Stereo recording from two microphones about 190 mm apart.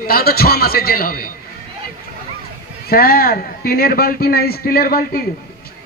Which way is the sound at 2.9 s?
50° left (ahead or behind).